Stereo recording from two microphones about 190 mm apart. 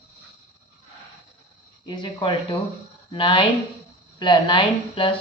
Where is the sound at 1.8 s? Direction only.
25° left (ahead or behind).